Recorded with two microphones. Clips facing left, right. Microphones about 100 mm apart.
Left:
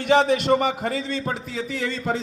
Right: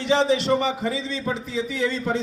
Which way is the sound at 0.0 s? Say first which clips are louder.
Left 2 dB; 55° left (ahead or behind).